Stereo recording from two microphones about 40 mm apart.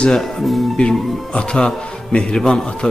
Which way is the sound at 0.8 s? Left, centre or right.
Left.